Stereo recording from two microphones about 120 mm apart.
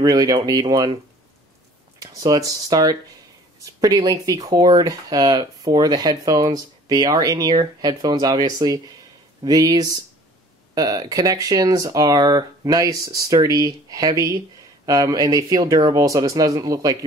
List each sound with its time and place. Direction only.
0.0 s speech: 30° right (ahead or behind)
2.0 s speech: 30° right (ahead or behind)